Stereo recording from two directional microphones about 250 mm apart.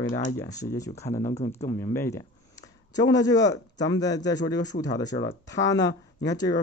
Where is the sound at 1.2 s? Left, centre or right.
Left.